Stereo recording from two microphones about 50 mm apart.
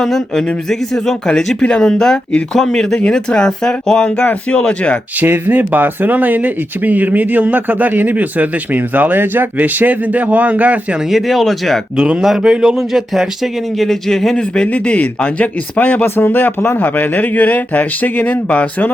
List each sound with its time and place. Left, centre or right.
0.0 s speech: centre
4.2 s speech: left
5.5 s speech: right
11.1 s speech: centre
12.4 s speech: centre
14.7 s speech: left
16.0 s a man's voice: left